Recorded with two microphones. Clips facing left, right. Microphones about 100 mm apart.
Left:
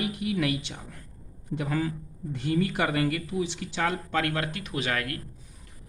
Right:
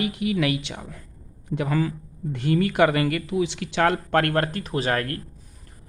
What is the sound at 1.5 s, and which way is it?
A man's voice, 70° right (ahead or behind).